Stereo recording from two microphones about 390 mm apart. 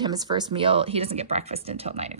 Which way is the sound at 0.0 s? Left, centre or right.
Centre.